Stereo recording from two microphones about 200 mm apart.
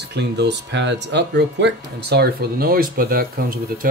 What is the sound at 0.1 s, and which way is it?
Speech, 60° right (ahead or behind).